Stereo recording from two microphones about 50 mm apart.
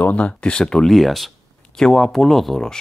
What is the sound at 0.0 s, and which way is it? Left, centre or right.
Speech, left.